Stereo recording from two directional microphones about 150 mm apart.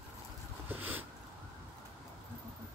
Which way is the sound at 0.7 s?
10° right (ahead or behind).